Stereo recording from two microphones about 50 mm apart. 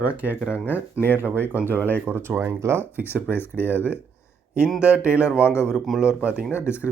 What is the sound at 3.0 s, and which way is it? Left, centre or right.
Speech, right.